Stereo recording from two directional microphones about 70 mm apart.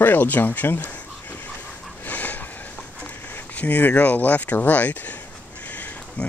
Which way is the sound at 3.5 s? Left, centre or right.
Left.